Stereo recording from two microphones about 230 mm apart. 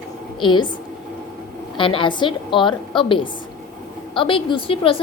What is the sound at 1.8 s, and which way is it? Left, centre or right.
A woman's voice, left.